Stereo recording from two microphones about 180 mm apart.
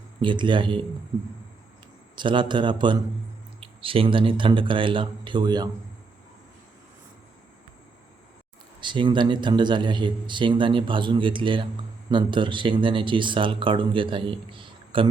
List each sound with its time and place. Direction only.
0.2 s speech: 25° right (ahead or behind)
2.1 s speech: 25° right (ahead or behind)
8.8 s speech: 25° right (ahead or behind)